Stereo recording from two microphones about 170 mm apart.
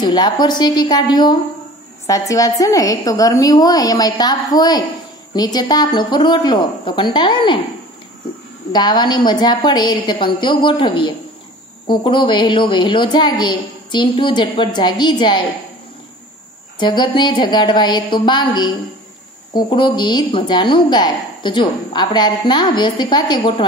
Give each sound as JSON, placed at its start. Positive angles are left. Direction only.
{"t": 0.0, "sound": "a woman's voice", "side_deg": 25}
{"t": 8.7, "sound": "a woman's voice", "side_deg": 25}
{"t": 16.8, "sound": "a woman's voice", "side_deg": 25}